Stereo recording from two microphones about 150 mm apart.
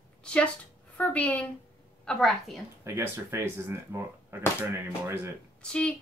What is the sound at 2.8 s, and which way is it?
Speech, 15° right (ahead or behind).